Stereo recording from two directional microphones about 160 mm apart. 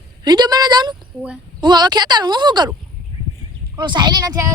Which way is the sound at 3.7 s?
30° right (ahead or behind).